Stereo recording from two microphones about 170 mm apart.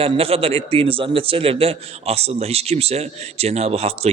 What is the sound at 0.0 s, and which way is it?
A man's voice, 35° right (ahead or behind).